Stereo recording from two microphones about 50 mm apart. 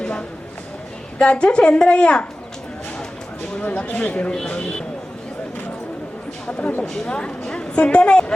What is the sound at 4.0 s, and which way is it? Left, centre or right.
Speech, left.